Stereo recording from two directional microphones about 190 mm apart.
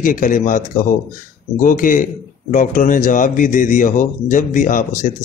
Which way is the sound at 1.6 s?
45° left (ahead or behind).